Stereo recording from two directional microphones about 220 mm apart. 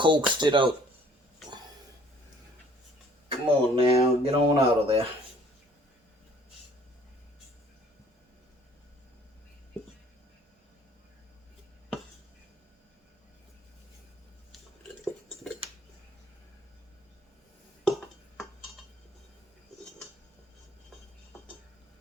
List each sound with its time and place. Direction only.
0.0 s speech: 20° right (ahead or behind)
3.2 s speech: 25° right (ahead or behind)